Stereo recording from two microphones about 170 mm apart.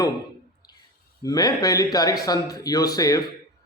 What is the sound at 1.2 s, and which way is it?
Speech, 20° left (ahead or behind).